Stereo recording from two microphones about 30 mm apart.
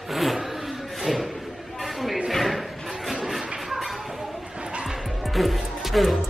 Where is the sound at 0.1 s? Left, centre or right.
Centre.